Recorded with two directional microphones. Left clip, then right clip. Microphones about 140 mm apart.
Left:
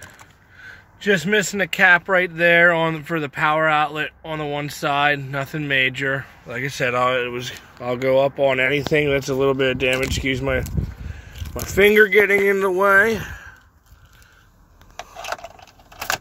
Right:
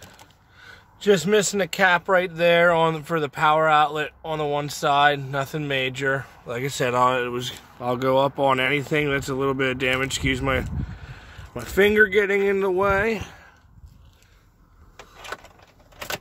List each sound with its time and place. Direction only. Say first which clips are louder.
1.0 s speech: even; 20° right (ahead or behind); by 8.6 s 40° right (ahead or behind)
8.6 s speech: left 4 dB; 10° right (ahead or behind)
12.9 s speech: left 7 dB; 5° left (ahead or behind)